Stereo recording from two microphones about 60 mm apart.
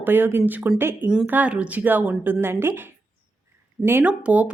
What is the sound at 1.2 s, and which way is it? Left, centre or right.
A woman's voice, right.